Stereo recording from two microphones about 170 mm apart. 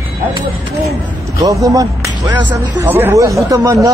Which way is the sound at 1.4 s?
20° right (ahead or behind).